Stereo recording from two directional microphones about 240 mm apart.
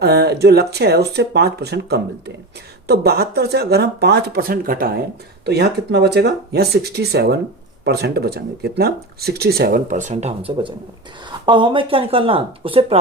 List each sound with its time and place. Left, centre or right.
0.0 s speech: right